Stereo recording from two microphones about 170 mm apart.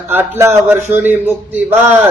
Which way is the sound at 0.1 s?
15° right (ahead or behind).